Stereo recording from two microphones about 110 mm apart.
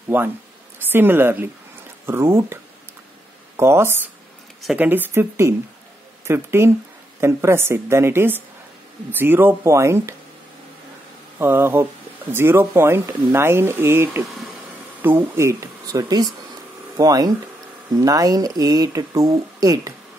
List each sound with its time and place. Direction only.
0.1 s speech: 15° right (ahead or behind)
11.3 s speech: 20° right (ahead or behind)